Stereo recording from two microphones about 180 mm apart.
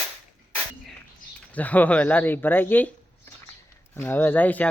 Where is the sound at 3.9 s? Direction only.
10° left (ahead or behind).